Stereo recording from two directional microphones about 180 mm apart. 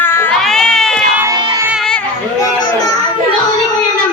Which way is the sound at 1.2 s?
20° right (ahead or behind).